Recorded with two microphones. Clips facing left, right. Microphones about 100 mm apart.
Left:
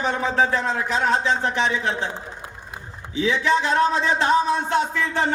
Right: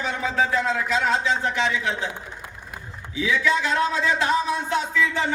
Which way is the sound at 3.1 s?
30° left (ahead or behind).